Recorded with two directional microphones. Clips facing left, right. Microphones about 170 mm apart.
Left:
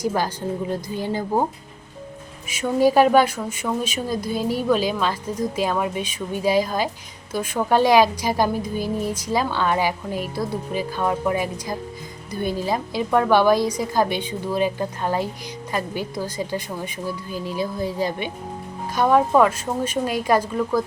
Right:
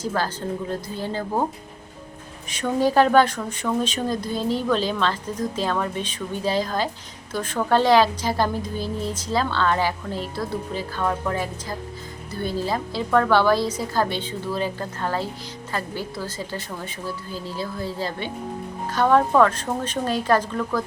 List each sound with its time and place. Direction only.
0.0 s speech: 15° left (ahead or behind)
2.5 s speech: 10° left (ahead or behind)